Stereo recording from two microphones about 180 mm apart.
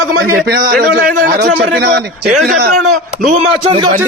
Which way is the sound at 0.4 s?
55° right (ahead or behind).